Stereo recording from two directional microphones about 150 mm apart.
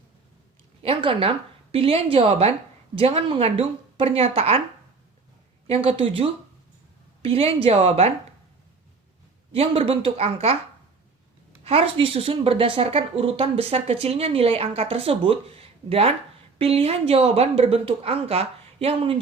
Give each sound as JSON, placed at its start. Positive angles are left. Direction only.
{"t": 0.8, "sound": "a woman's voice", "side_deg": -40}
{"t": 5.6, "sound": "a woman's voice", "side_deg": -40}
{"t": 9.5, "sound": "a woman's voice", "side_deg": -40}
{"t": 11.6, "sound": "a woman's voice", "side_deg": -40}